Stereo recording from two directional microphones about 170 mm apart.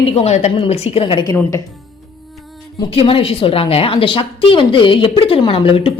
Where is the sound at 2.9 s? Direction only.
30° left (ahead or behind).